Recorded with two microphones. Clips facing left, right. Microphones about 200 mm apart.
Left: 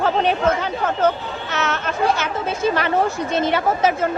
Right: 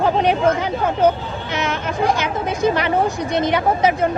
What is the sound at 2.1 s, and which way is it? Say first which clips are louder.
A woman's voice: right 2 dB; 15° right (ahead or behind).